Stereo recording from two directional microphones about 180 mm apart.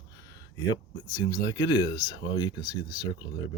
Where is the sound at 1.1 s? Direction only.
20° left (ahead or behind).